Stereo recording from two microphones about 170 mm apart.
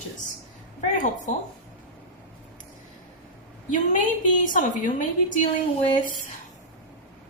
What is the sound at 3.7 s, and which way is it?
Speech, 50° left (ahead or behind).